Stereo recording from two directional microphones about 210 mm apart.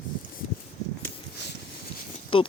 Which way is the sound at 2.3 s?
25° left (ahead or behind).